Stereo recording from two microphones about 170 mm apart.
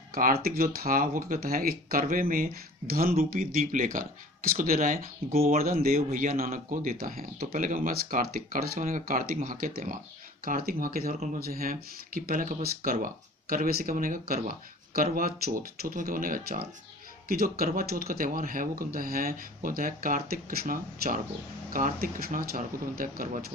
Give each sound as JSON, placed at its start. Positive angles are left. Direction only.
{"t": 0.1, "sound": "speech", "side_deg": -55}